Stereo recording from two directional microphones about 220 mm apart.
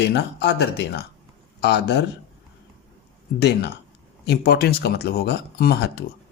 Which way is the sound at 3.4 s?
50° left (ahead or behind).